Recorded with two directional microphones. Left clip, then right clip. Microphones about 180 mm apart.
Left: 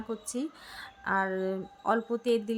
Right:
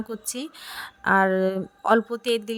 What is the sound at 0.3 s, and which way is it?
Speech, 45° right (ahead or behind).